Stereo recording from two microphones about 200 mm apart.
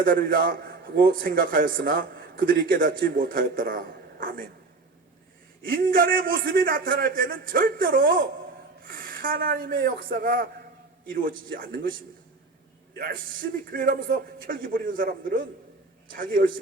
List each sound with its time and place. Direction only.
0.0 s a man's voice: 45° right (ahead or behind)
5.6 s a man's voice: 45° right (ahead or behind)
13.0 s a man's voice: 45° right (ahead or behind)